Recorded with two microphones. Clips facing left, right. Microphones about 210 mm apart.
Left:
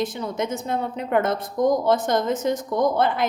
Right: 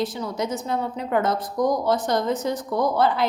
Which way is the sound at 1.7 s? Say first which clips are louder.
Left 3 dB; 55° left (ahead or behind).